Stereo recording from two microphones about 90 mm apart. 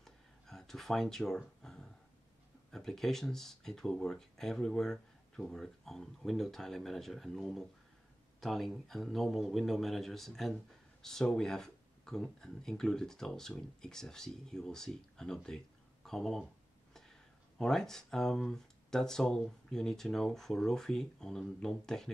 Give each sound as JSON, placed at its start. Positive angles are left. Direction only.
{"t": 0.0, "sound": "a sound", "side_deg": 5}
{"t": 2.7, "sound": "speech", "side_deg": 5}
{"t": 17.6, "sound": "speech", "side_deg": 5}